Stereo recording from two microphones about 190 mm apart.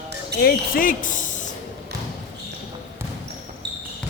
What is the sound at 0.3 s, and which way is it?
Speech, 55° left (ahead or behind).